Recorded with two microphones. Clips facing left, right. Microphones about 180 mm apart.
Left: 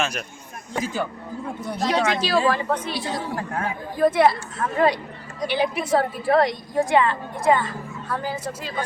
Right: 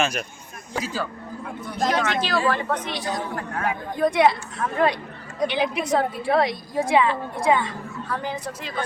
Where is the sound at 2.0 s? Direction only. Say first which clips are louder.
Left 2 dB; 10° left (ahead or behind).